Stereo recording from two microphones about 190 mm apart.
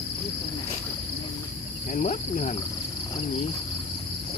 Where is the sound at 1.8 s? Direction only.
40° left (ahead or behind).